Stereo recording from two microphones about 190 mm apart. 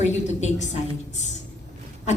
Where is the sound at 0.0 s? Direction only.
35° left (ahead or behind).